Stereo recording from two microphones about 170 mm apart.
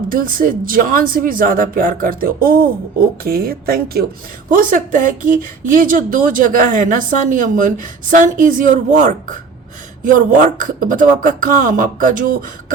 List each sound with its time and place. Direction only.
0.1 s speech: 55° right (ahead or behind)